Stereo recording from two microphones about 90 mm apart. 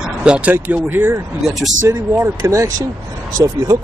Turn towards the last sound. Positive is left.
turn(degrees=-35)  # may be behind; listen again after turning